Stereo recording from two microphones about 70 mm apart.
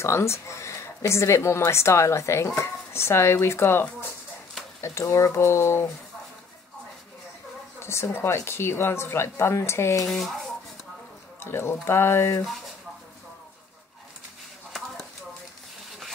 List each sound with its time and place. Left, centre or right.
0.0 s speech: left
5.3 s speech: left
7.8 s speech: left
10.0 s rub: centre
11.3 s speech: left